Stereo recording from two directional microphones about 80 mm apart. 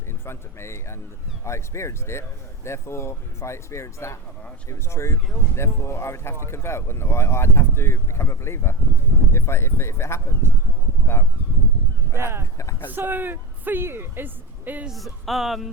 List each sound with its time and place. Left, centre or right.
0.1 s speech: left
12.1 s a woman's voice: right
14.8 s speech: centre